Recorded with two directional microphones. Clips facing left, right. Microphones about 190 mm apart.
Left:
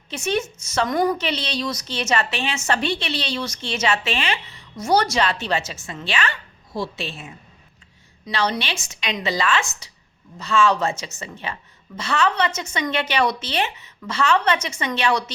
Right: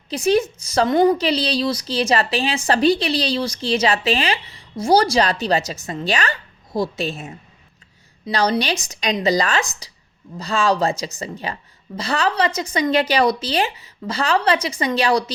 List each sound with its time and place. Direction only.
0.1 s a woman's voice: 35° right (ahead or behind)